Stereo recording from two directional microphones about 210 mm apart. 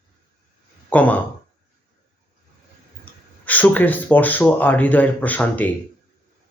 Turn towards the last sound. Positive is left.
turn(degrees=5)  # may be behind; listen again after turning